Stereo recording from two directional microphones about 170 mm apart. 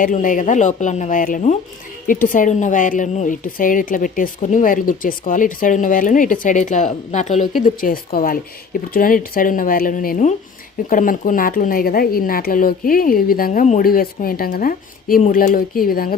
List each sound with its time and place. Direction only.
0.0 s a woman's voice: 50° left (ahead or behind)